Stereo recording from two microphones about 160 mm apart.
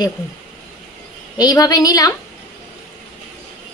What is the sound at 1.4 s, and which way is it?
Speech, 25° left (ahead or behind).